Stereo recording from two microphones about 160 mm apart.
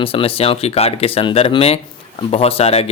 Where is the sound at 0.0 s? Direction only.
35° left (ahead or behind).